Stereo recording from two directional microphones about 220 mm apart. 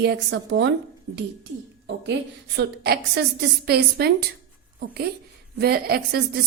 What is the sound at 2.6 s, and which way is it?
A woman's voice, 45° right (ahead or behind).